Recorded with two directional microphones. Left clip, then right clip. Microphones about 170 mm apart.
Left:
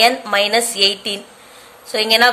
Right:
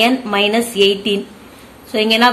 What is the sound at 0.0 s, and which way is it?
Speech, 40° left (ahead or behind).